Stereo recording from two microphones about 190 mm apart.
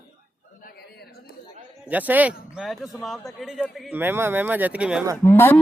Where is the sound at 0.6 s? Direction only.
50° left (ahead or behind).